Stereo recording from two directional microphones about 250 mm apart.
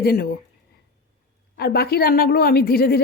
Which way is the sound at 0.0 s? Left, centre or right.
Left.